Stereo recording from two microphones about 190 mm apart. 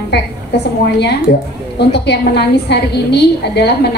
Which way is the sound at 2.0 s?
60° left (ahead or behind).